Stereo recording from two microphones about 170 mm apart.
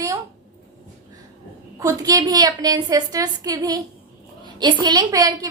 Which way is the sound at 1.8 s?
20° right (ahead or behind).